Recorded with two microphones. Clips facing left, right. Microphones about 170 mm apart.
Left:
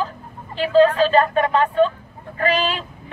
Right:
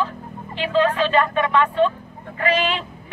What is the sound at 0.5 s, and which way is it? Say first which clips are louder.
Speech: left 5 dB; 35° left (ahead or behind).